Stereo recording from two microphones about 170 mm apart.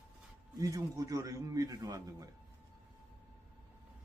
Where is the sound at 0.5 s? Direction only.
20° right (ahead or behind).